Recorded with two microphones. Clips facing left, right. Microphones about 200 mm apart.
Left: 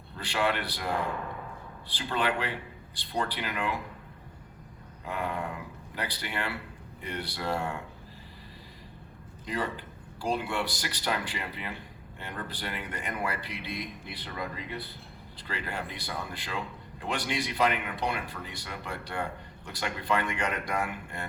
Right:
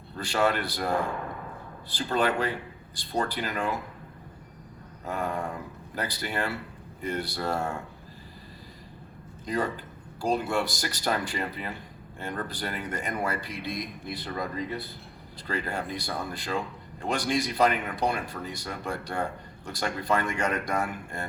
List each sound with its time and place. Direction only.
0.2 s speech: 45° right (ahead or behind)
5.0 s speech: 45° right (ahead or behind)
9.5 s speech: 45° right (ahead or behind)